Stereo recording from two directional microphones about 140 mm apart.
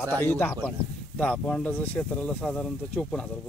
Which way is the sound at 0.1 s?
15° left (ahead or behind).